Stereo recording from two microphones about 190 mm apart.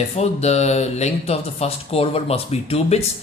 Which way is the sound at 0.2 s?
35° left (ahead or behind).